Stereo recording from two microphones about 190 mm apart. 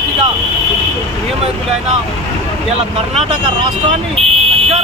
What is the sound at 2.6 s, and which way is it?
Speech, 30° right (ahead or behind).